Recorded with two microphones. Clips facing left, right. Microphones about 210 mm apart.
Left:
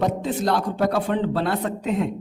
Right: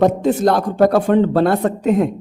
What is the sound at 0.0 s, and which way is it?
Speech, 45° right (ahead or behind).